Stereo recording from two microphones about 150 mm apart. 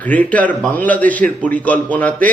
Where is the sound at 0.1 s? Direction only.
10° left (ahead or behind).